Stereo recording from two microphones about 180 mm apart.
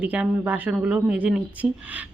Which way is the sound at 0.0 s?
5° right (ahead or behind).